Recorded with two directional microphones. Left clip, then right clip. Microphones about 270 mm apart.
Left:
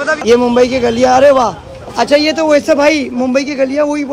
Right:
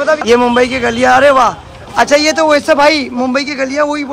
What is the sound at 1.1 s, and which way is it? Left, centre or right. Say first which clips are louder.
A man's voice: right 1 dB; centre.